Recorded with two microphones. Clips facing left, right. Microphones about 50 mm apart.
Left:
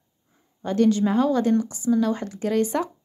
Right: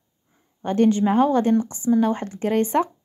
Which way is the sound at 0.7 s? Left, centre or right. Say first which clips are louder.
Right 2 dB; right.